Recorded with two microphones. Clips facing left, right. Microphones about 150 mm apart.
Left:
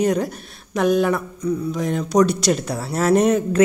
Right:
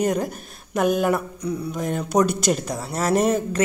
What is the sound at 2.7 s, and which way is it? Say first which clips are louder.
Speech: left 4 dB; centre (ahead or behind).